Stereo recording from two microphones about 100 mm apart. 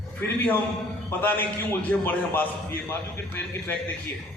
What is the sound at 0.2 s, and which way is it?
A man's voice, 20° left (ahead or behind).